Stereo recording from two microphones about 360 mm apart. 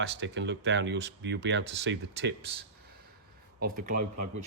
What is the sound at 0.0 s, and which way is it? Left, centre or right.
Speech, right.